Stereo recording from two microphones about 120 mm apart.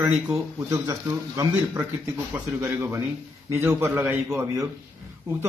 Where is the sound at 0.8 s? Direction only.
25° right (ahead or behind).